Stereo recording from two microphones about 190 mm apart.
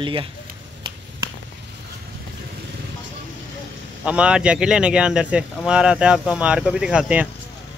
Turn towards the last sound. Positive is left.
turn(degrees=-5)  # may be behind; listen again after turning